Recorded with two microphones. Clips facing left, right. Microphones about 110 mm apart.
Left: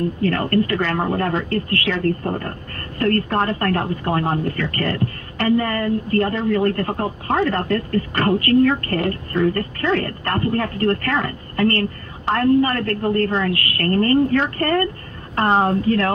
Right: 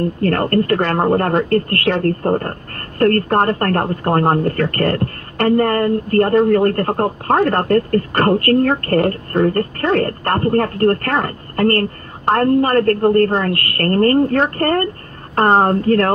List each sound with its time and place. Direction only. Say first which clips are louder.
0.2 s speech: right 3 dB; 50° right (ahead or behind)